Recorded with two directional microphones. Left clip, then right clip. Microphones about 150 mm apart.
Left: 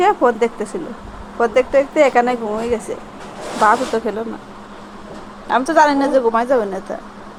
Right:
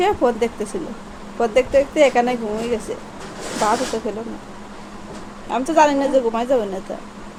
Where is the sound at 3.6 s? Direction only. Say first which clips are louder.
Left 5 dB; 20° left (ahead or behind).